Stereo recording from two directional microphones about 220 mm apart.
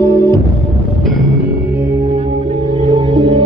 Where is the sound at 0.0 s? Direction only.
15° left (ahead or behind).